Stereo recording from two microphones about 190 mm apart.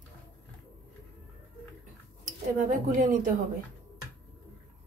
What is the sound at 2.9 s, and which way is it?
Speech, 40° right (ahead or behind).